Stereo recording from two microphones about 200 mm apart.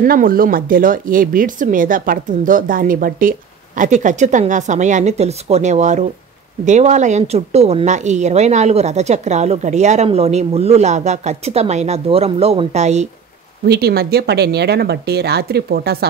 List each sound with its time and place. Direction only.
0.0 s speech: 45° right (ahead or behind)
13.7 s speech: 50° right (ahead or behind)